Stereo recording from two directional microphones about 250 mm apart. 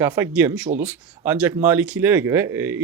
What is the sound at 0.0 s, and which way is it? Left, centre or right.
Speech, centre.